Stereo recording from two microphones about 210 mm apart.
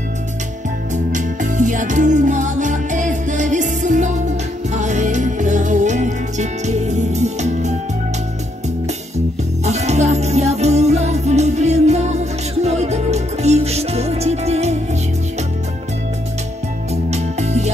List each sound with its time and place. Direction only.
1.1 s music: 35° right (ahead or behind)
9.7 s music: 30° right (ahead or behind)
16.9 s music: 30° right (ahead or behind)